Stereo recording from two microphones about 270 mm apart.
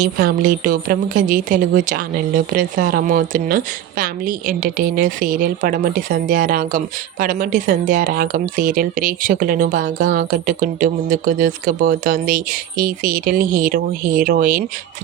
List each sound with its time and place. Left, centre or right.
0.0 s a woman's voice: right